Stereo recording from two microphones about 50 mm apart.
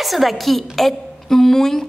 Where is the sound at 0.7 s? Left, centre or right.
Centre.